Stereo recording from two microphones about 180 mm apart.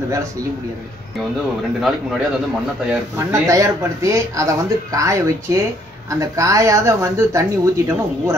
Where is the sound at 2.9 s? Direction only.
15° right (ahead or behind).